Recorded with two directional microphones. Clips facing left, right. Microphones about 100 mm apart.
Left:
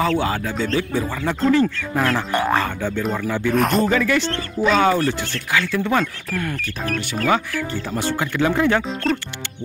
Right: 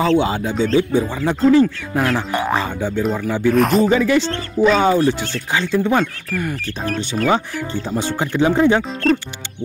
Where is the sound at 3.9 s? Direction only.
15° right (ahead or behind).